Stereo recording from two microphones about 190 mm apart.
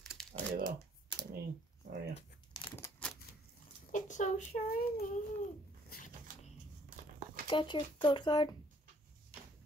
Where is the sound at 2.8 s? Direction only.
5° left (ahead or behind).